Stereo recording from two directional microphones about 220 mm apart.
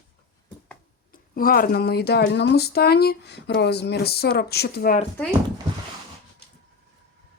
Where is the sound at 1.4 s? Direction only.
40° left (ahead or behind).